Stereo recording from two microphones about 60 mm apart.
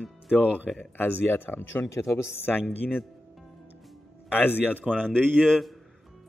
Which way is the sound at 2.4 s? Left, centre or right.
Left.